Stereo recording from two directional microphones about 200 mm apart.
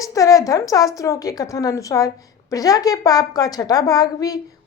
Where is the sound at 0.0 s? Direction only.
15° left (ahead or behind).